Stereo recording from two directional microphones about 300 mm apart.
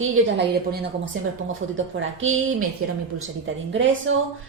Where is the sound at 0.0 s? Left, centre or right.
Right.